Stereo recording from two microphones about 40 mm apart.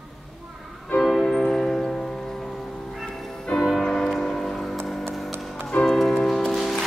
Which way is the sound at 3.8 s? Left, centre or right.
Centre.